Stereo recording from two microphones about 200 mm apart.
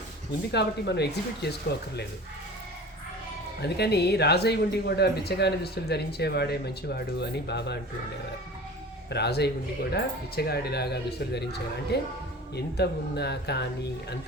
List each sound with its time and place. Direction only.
0.5 s speech: 55° left (ahead or behind)
3.6 s speech: 55° left (ahead or behind)
9.0 s speech: 55° left (ahead or behind)